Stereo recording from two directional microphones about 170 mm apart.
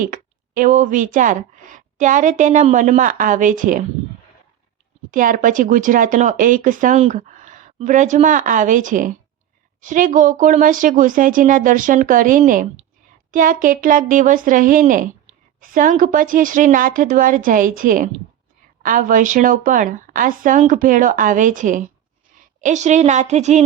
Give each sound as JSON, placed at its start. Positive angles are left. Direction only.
{"t": 0.0, "sound": "speech", "side_deg": -50}
{"t": 5.1, "sound": "speech", "side_deg": -50}